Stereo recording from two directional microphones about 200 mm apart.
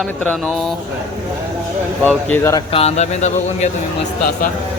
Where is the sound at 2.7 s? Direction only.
30° left (ahead or behind).